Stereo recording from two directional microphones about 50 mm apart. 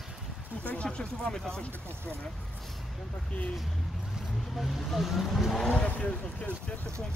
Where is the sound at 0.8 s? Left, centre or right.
Centre.